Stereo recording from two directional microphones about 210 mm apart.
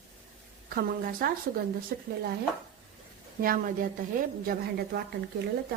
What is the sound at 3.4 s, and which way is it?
Speech, 40° right (ahead or behind).